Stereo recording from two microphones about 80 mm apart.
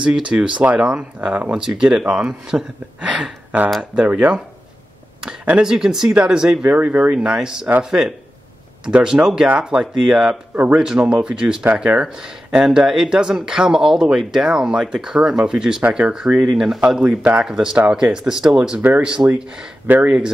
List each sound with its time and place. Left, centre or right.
0.0 s speech: centre
5.6 s speech: centre
7.2 s speech: centre
10.5 s a man's voice: right
10.8 s speech: centre
18.8 s speech: right
19.0 s speech: centre